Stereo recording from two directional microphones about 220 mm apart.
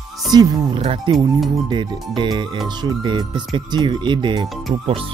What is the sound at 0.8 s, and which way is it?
Speech, 30° right (ahead or behind).